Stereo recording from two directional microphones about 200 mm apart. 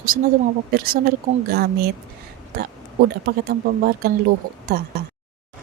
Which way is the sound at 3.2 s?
50° right (ahead or behind).